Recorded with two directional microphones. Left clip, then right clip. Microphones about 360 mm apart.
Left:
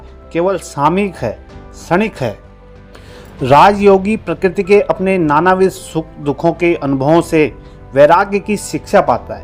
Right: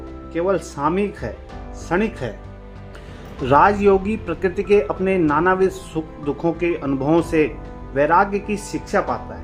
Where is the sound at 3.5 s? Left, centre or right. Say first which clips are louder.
Left 7 dB; centre.